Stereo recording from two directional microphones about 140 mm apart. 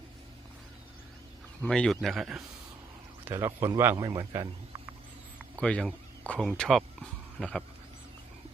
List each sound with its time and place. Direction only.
1.6 s speech: 5° left (ahead or behind)
3.2 s speech: 20° right (ahead or behind)
5.5 s speech: 5° left (ahead or behind)